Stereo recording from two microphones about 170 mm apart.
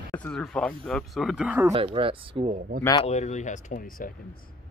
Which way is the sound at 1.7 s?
35° right (ahead or behind).